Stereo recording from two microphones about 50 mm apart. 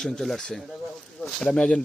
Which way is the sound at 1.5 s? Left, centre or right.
Centre.